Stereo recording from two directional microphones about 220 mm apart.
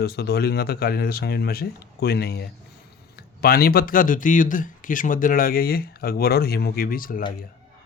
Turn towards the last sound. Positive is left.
turn(degrees=40)  # may be behind; listen again after turning